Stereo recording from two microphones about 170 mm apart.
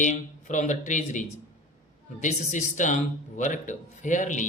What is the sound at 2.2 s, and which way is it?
A man's voice, 45° left (ahead or behind).